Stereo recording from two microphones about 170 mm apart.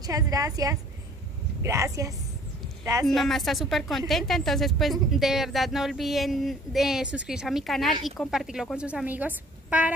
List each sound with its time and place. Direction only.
0.0 s a woman's voice: 20° right (ahead or behind)
3.2 s speech: centre (ahead or behind)